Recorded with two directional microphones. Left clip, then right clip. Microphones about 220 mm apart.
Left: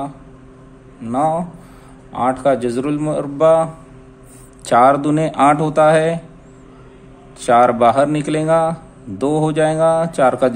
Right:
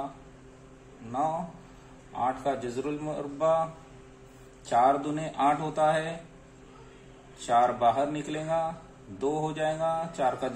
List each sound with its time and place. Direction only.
2.1 s speech: 50° left (ahead or behind)
4.6 s speech: 50° left (ahead or behind)
7.3 s speech: 50° left (ahead or behind)